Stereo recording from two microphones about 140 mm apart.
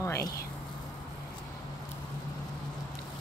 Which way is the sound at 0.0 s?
20° left (ahead or behind).